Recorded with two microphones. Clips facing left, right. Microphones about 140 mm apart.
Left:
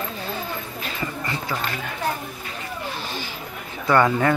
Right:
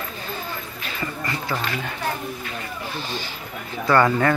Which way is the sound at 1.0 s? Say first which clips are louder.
Right 1 dB; 15° left (ahead or behind).